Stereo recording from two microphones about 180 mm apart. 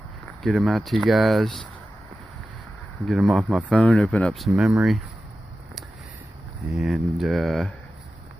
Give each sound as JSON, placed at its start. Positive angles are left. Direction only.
{"t": 0.4, "sound": "speech", "side_deg": 0}
{"t": 3.1, "sound": "speech", "side_deg": -5}
{"t": 3.7, "sound": "speech", "side_deg": 5}
{"t": 6.8, "sound": "speech", "side_deg": 0}